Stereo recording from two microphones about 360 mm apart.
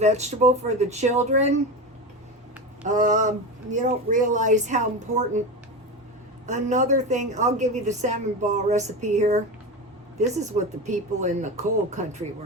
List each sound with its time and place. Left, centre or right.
0.0 s a woman's voice: centre
2.8 s a woman's voice: right
6.4 s a woman's voice: centre